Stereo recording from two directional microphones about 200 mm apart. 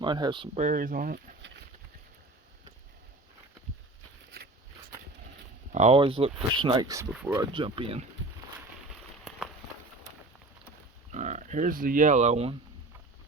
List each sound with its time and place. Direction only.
0.0 s speech: 20° right (ahead or behind)
0.6 s speech: 45° right (ahead or behind)
5.7 s speech: 30° right (ahead or behind)
11.1 s speech: 35° right (ahead or behind)